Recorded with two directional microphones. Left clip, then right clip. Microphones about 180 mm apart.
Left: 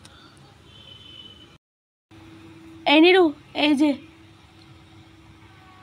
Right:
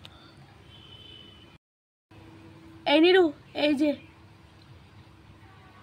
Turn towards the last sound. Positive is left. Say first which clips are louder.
# left 5 dB
turn(degrees=20)  # may be behind; listen again after turning